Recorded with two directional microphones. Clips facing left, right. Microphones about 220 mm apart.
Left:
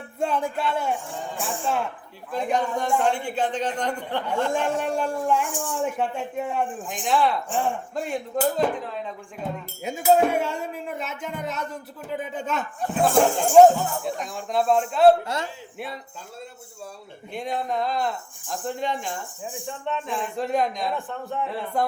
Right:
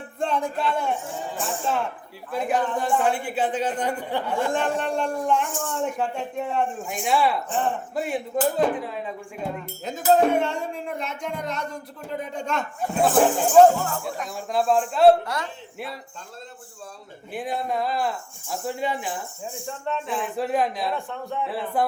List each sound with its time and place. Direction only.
0.2 s speech: 5° left (ahead or behind)
2.3 s a man's voice: 5° right (ahead or behind)
4.5 s speech: 10° left (ahead or behind)
5.5 s speech: 15° left (ahead or behind)
6.9 s a man's voice: 10° right (ahead or behind)
9.8 s speech: 10° left (ahead or behind)
13.1 s a man's voice: 5° right (ahead or behind)
13.5 s speech: 10° left (ahead or behind)
14.0 s speech: centre (ahead or behind)
15.2 s a man's voice: 25° left (ahead or behind)
17.3 s speech: 5° right (ahead or behind)